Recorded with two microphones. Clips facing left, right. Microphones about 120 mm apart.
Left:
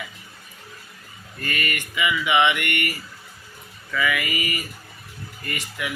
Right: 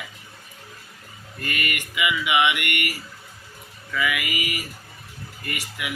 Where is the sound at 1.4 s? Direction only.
10° right (ahead or behind).